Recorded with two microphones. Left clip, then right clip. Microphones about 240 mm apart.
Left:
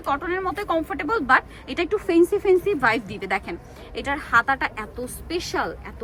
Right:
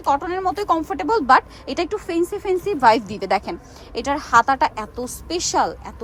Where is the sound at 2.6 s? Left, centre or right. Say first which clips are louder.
Right 5 dB; centre.